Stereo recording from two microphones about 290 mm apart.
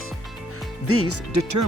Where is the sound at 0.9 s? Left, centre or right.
Right.